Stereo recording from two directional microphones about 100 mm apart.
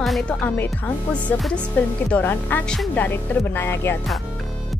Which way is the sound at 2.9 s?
20° left (ahead or behind).